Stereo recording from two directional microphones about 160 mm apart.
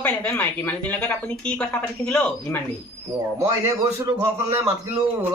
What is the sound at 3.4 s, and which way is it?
Speech, 20° right (ahead or behind).